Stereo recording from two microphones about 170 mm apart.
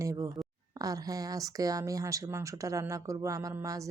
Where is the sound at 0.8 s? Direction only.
20° right (ahead or behind).